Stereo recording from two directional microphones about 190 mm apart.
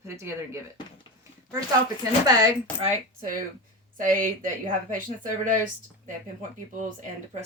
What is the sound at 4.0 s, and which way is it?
Speech, 45° right (ahead or behind).